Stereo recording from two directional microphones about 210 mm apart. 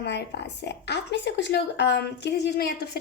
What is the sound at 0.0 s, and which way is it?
A woman's voice, 55° left (ahead or behind).